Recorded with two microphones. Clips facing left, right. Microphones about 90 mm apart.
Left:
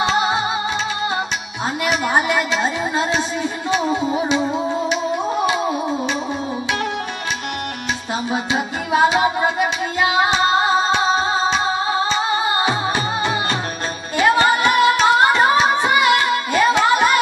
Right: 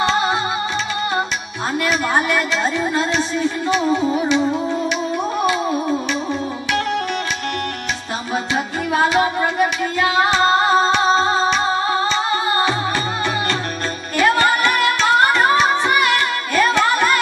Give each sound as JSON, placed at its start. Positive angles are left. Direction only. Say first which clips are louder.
{"t": 0.0, "sound": "flamenco", "louder": "even", "side_deg": 20}
{"t": 1.9, "sound": "a woman's voice", "louder": "left 1 dB", "side_deg": 20}
{"t": 5.5, "sound": "music", "louder": "right 1 dB", "side_deg": 20}
{"t": 8.9, "sound": "music", "louder": "left 1 dB", "side_deg": 20}
{"t": 14.1, "sound": "music", "louder": "left 1 dB", "side_deg": 20}